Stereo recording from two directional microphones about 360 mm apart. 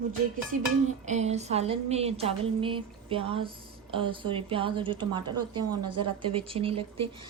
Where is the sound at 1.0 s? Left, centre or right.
Centre.